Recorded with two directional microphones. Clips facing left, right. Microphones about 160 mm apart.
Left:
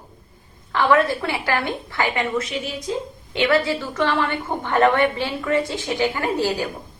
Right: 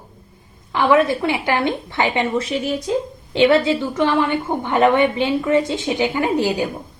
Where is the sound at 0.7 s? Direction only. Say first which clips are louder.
Right 2 dB; 15° right (ahead or behind).